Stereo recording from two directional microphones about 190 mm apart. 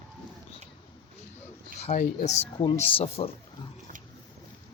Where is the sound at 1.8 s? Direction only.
35° left (ahead or behind).